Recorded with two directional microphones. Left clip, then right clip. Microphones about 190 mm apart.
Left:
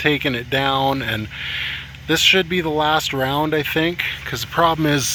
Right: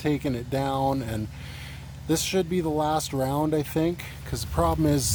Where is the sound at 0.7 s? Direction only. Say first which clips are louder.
Left 6 dB; 15° left (ahead or behind).